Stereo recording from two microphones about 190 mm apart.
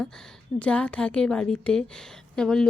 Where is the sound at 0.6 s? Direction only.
5° left (ahead or behind).